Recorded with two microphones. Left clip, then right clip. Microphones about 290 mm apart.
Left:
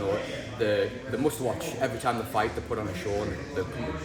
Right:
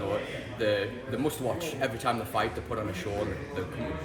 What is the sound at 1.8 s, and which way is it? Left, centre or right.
Speech, centre.